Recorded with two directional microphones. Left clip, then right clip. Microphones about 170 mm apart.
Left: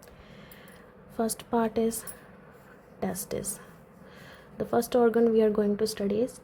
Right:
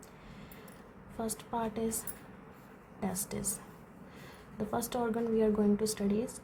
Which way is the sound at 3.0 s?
35° left (ahead or behind).